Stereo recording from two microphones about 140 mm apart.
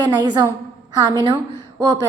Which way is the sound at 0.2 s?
30° right (ahead or behind).